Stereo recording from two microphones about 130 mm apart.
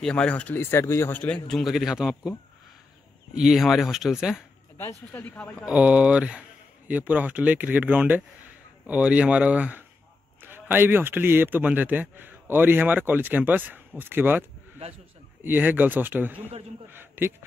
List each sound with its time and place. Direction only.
0.0 s speech: 10° left (ahead or behind)
1.5 s speech: centre (ahead or behind)
3.3 s speech: 5° right (ahead or behind)
4.7 s speech: 15° left (ahead or behind)
5.7 s speech: 10° right (ahead or behind)
15.4 s speech: 15° right (ahead or behind)